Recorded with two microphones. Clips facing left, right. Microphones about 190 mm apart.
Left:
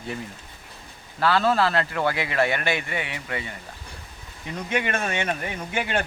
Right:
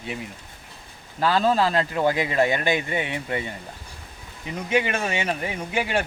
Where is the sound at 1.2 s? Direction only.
15° right (ahead or behind).